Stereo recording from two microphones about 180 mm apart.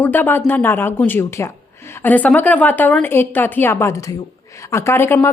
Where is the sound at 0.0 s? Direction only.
10° left (ahead or behind).